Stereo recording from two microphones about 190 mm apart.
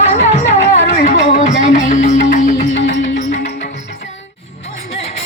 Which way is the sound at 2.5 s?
75° left (ahead or behind).